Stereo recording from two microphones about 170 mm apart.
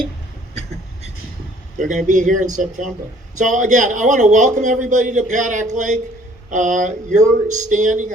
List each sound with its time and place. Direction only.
1.8 s a man's voice: 50° right (ahead or behind)